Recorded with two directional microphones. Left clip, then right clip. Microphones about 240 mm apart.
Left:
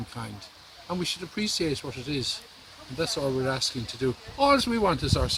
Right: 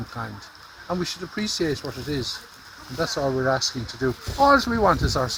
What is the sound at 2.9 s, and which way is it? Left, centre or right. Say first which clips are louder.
Speech: right 4 dB; left.